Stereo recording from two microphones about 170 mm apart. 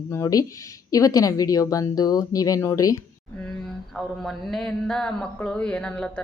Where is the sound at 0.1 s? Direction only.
20° left (ahead or behind).